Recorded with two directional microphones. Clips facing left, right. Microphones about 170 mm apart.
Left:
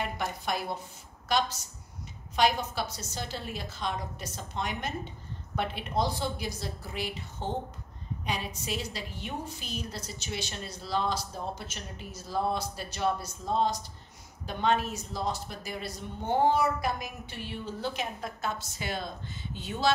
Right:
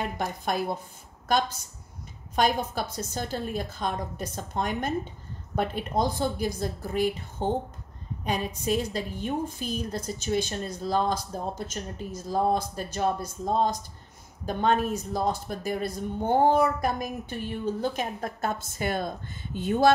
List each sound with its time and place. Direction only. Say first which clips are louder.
0.2 s a woman's voice: right 4 dB; 50° right (ahead or behind)
2.3 s a woman's voice: right 2 dB; 45° right (ahead or behind)